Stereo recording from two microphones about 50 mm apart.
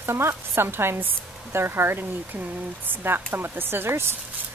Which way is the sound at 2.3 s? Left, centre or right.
Right.